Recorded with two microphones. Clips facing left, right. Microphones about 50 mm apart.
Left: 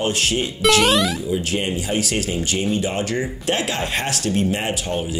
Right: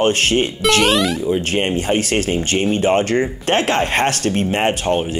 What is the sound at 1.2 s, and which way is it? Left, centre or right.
Speech, right.